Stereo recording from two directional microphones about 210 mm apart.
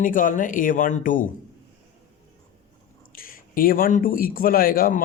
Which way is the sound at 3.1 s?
45° left (ahead or behind).